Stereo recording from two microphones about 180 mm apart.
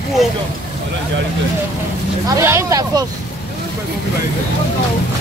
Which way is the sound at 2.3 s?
15° right (ahead or behind).